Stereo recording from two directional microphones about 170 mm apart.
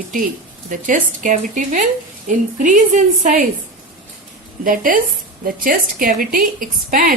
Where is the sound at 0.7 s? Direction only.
50° right (ahead or behind).